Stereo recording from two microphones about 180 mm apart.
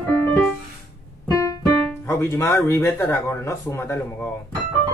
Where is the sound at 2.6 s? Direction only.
15° left (ahead or behind).